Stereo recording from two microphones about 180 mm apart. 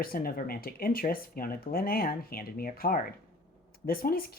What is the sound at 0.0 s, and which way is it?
A woman's voice, 55° left (ahead or behind).